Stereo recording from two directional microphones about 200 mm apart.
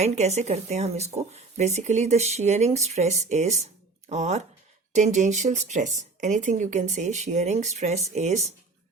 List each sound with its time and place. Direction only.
0.0 s speech: 35° right (ahead or behind)